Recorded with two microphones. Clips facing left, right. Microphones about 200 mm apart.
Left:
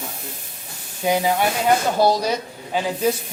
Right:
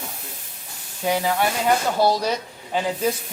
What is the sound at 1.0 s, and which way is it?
Speech, 15° left (ahead or behind).